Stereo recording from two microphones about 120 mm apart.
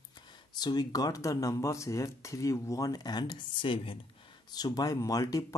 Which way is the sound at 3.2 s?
45° left (ahead or behind).